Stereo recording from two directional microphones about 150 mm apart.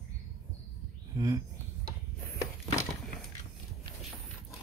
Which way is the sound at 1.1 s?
20° right (ahead or behind).